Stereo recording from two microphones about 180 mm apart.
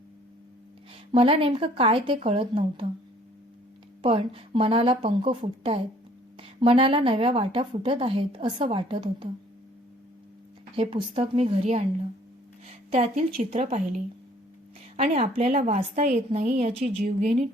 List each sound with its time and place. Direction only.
1.1 s a woman's voice: 30° right (ahead or behind)
4.0 s a woman's voice: 30° right (ahead or behind)
10.8 s a woman's voice: 35° right (ahead or behind)